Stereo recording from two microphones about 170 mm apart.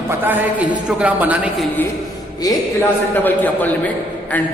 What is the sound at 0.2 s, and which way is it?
A man's voice, 10° right (ahead or behind).